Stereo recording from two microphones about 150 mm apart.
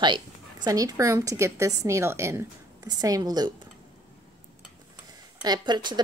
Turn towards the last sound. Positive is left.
turn(degrees=-30)  # may be behind; listen again after turning